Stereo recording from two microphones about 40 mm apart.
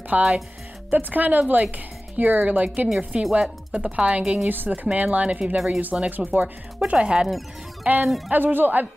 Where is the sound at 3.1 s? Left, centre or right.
Right.